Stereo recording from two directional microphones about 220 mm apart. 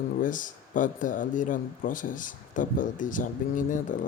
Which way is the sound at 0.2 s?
35° left (ahead or behind).